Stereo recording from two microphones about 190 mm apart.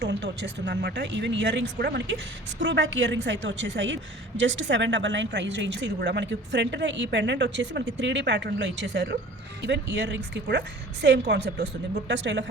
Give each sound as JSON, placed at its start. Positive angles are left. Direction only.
{"t": 0.0, "sound": "a woman's voice", "side_deg": -65}